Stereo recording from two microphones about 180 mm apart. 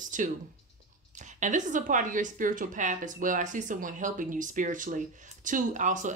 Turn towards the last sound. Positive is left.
turn(degrees=-45)  # may be behind; listen again after turning